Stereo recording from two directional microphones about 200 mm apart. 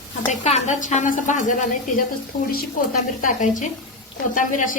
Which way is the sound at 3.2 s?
40° left (ahead or behind).